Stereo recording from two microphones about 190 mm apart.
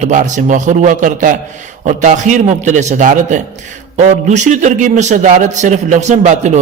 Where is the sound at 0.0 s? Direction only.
40° right (ahead or behind).